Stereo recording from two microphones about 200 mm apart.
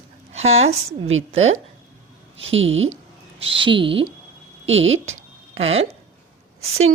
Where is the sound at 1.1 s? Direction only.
80° right.